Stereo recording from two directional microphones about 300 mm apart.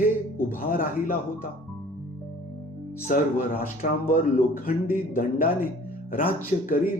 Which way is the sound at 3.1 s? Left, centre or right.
Left.